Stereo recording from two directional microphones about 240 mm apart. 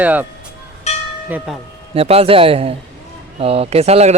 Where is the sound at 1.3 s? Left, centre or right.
Centre.